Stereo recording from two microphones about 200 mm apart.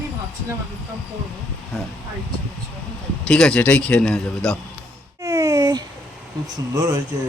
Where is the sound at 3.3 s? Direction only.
5° left (ahead or behind).